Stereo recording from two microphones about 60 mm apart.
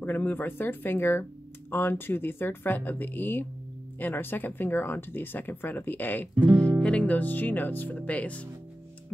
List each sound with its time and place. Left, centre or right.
0.0 s speech: left
6.8 s speech: left